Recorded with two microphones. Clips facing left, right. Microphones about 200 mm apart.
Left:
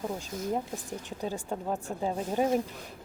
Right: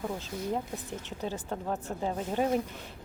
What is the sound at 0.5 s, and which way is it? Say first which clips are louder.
Speech: left 1 dB; 15° left (ahead or behind).